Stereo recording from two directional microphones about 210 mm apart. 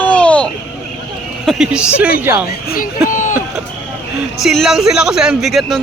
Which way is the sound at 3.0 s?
40° left (ahead or behind).